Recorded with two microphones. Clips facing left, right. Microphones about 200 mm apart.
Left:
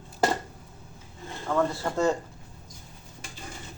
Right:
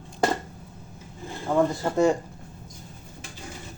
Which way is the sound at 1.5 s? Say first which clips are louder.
Right 3 dB; 20° right (ahead or behind).